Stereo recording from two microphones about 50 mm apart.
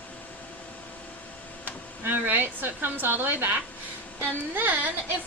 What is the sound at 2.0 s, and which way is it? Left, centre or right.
A woman's voice, right.